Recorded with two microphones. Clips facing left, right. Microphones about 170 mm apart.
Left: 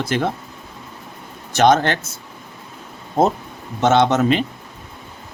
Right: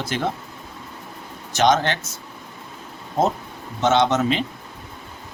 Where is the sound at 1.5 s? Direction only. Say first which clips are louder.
Left 4 dB; 55° left (ahead or behind).